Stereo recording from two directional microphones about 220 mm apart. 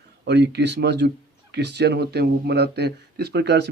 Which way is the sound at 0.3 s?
50° right (ahead or behind).